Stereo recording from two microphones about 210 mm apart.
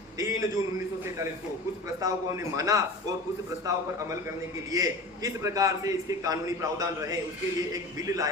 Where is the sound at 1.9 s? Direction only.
15° right (ahead or behind).